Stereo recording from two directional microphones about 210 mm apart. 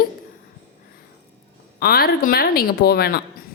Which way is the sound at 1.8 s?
45° left (ahead or behind).